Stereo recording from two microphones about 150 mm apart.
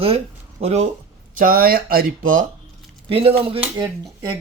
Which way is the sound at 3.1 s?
40° right (ahead or behind).